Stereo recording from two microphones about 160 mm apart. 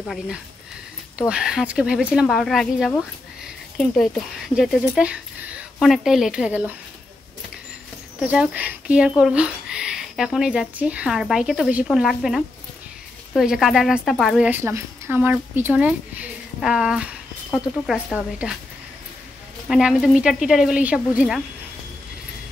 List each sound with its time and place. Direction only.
1.3 s speech: 5° right (ahead or behind)
8.2 s speech: 5° right (ahead or behind)
14.5 s a woman's voice: 15° right (ahead or behind)
19.7 s speech: centre (ahead or behind)